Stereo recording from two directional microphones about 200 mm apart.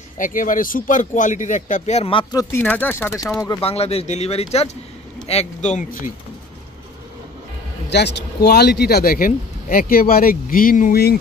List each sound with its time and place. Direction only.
0.2 s speech: 40° left (ahead or behind); by 2.4 s 25° left (ahead or behind)
2.5 s speech: 10° left (ahead or behind)
3.6 s speech: 30° left (ahead or behind)
7.9 s speech: 55° left (ahead or behind)